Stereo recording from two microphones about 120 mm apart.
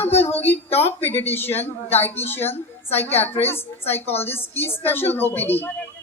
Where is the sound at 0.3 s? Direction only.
15° left (ahead or behind).